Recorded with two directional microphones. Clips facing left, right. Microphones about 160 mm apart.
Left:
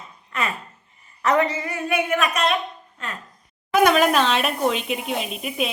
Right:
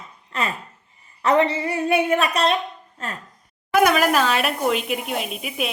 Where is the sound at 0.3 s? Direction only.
35° right (ahead or behind).